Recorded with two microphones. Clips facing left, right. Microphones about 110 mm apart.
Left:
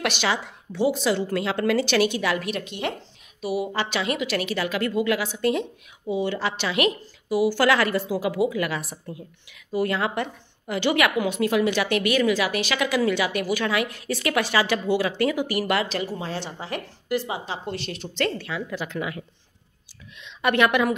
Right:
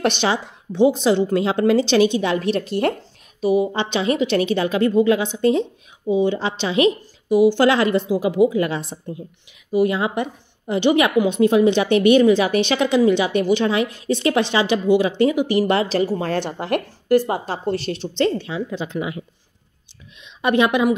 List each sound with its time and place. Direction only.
0.0 s a woman's voice: 30° right (ahead or behind)
3.6 s a woman's voice: 25° right (ahead or behind)
16.0 s a woman's voice: 45° right (ahead or behind)
17.3 s a woman's voice: 40° right (ahead or behind); by 20.9 s 20° right (ahead or behind)